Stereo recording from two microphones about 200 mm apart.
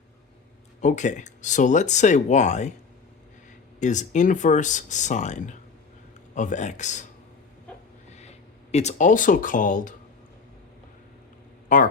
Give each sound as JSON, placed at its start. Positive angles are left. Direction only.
{"t": 0.8, "sound": "speech", "side_deg": 35}
{"t": 3.8, "sound": "speech", "side_deg": 35}
{"t": 8.1, "sound": "speech", "side_deg": 35}
{"t": 11.7, "sound": "speech", "side_deg": 40}